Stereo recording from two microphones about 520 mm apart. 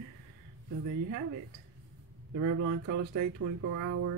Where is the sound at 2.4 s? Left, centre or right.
Right.